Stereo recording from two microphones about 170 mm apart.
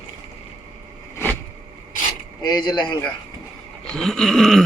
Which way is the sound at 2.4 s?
25° left (ahead or behind).